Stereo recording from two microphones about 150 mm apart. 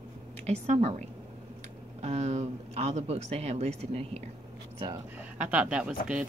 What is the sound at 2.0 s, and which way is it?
Speech, 50° right (ahead or behind).